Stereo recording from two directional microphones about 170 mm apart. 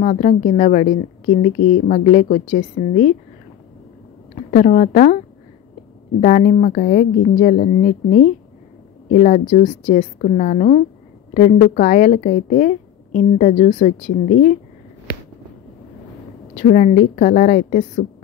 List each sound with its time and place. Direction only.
0.0 s a woman's voice: 45° left (ahead or behind)
4.5 s a woman's voice: 50° left (ahead or behind)
6.2 s a woman's voice: 45° left (ahead or behind)
16.5 s a woman's voice: 50° left (ahead or behind)